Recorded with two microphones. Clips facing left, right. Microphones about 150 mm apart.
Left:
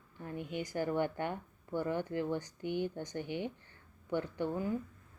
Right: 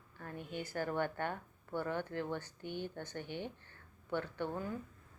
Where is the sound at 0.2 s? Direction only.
15° left (ahead or behind).